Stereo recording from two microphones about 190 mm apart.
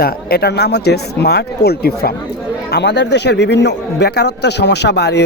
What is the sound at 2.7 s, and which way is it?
A man's voice, 65° left (ahead or behind).